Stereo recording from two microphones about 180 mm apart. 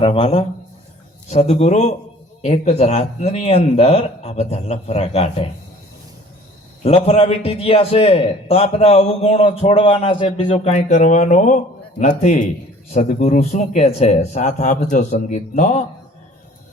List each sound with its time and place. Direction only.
0.0 s a man's voice: 30° left (ahead or behind)
6.8 s a man's voice: 35° left (ahead or behind)